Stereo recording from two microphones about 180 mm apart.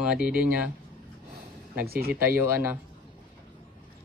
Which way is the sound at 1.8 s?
60° right (ahead or behind).